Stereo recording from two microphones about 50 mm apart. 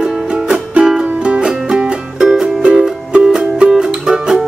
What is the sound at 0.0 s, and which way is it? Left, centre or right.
Music, centre.